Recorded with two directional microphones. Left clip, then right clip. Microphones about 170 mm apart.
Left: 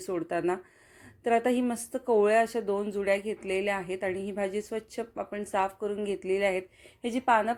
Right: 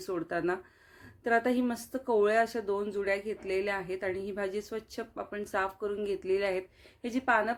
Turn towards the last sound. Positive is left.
turn(degrees=15)  # may be behind; listen again after turning